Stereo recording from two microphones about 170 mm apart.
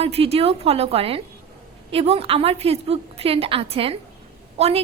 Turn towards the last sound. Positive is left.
turn(degrees=-40)  # may be behind; listen again after turning